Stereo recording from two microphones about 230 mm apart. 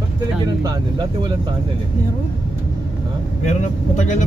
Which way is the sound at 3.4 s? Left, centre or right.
Left.